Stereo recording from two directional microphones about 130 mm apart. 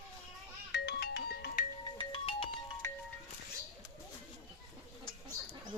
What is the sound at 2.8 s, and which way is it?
Music, 20° left (ahead or behind).